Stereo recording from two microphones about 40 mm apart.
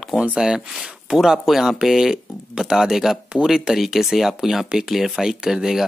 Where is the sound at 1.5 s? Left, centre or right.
Centre.